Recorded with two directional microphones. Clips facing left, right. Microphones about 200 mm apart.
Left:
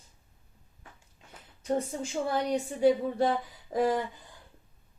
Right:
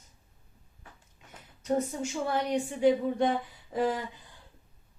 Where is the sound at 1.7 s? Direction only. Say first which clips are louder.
Right 1 dB; 30° left (ahead or behind).